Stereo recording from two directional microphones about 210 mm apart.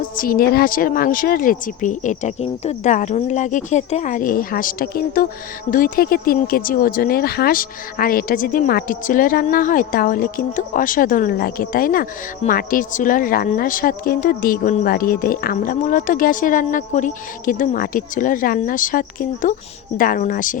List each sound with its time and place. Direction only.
0.0 s speech: 40° left (ahead or behind)